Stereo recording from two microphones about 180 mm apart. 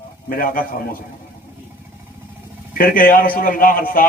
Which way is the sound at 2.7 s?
50° left (ahead or behind).